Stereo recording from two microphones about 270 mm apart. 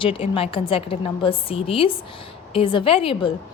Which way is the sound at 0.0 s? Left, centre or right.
Centre.